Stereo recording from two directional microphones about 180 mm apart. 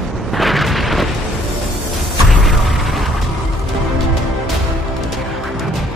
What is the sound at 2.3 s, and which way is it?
Artillery fire, centre (ahead or behind).